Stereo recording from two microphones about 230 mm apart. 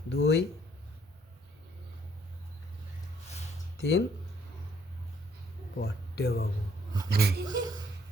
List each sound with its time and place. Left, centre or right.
0.1 s speech: left
3.8 s speech: left
5.8 s speech: left
7.1 s speech: right
7.4 s a woman's voice: centre